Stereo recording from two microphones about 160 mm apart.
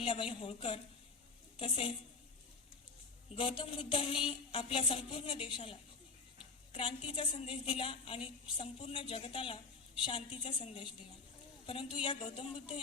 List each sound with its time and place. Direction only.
0.0 s a woman's voice: 35° left (ahead or behind)
3.3 s a woman's voice: 35° left (ahead or behind)
6.7 s a woman's voice: 35° left (ahead or behind)